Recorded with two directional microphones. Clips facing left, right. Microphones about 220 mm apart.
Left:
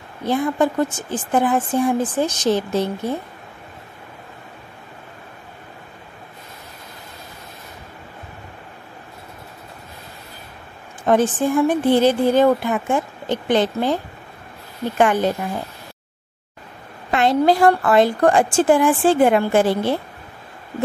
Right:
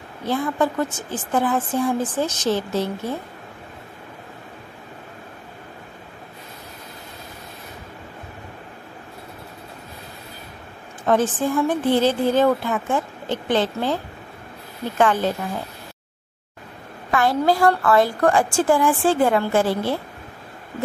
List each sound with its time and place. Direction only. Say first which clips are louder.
0.3 s a woman's voice: left 3 dB; 15° left (ahead or behind)
11.1 s a woman's voice: left 3 dB; 15° left (ahead or behind)
15.0 s a woman's voice: left 2 dB; 15° left (ahead or behind)
17.1 s a woman's voice: left 3 dB; 20° left (ahead or behind)